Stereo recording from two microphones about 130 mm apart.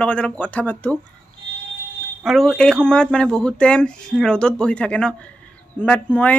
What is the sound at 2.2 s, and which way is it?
Speech, centre (ahead or behind).